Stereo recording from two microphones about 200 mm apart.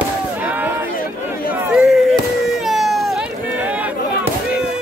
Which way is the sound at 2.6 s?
Centre (ahead or behind).